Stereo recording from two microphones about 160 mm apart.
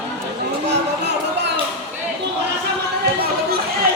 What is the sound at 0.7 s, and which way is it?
Music, 90° right.